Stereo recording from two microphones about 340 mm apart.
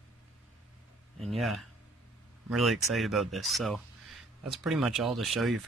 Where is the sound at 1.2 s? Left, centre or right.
Centre.